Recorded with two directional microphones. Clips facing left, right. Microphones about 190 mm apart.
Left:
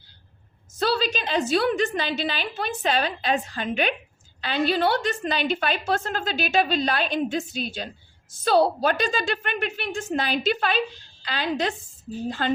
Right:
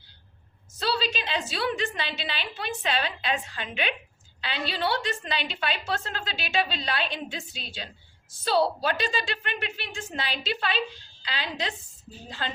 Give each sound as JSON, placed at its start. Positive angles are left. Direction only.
{"t": 0.8, "sound": "a woman's voice", "side_deg": 50}